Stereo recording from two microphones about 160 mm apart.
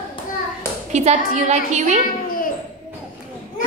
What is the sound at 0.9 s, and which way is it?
A woman's voice, 45° right (ahead or behind).